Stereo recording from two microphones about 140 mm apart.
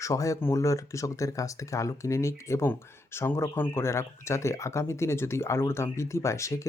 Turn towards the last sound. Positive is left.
turn(degrees=20)  # may be behind; listen again after turning